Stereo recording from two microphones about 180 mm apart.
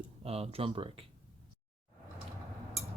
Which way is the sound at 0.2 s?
35° right (ahead or behind).